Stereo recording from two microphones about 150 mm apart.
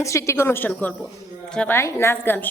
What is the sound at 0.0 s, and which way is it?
A woman's voice, 20° left (ahead or behind).